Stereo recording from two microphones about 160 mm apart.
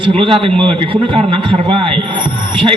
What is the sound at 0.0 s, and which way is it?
A man's voice, 35° right (ahead or behind).